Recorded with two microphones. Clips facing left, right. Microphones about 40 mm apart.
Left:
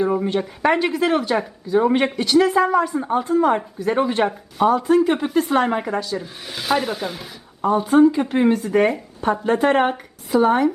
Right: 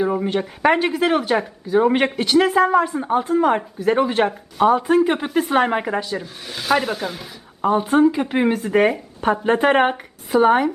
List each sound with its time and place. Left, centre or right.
0.0 s speech: centre
2.5 s speech: centre
6.5 s speech: centre
7.6 s speech: right
7.9 s speech: centre